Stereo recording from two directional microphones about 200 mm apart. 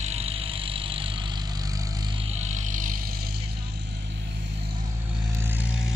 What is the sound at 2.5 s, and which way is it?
Vehicle, 40° right (ahead or behind).